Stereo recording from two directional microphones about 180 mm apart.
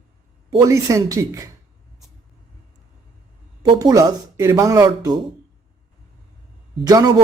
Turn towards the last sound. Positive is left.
turn(degrees=-20)  # may be behind; listen again after turning